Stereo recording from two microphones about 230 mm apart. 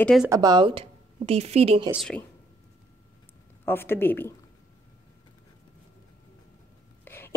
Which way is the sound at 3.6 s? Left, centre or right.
Centre.